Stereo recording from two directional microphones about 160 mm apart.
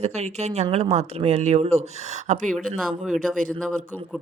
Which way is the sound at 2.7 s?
Centre (ahead or behind).